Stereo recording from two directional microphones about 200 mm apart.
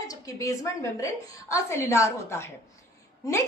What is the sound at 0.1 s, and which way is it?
A woman's voice, 15° left (ahead or behind).